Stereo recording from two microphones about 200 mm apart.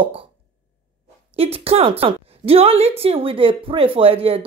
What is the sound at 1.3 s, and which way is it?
A woman's voice, 30° right (ahead or behind).